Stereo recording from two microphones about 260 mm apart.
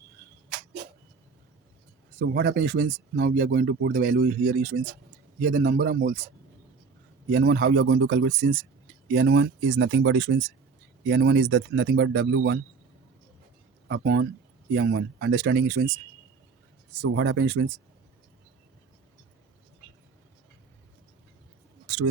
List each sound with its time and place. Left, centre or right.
2.1 s speech: right
7.3 s speech: right
13.8 s speech: right
17.0 s speech: right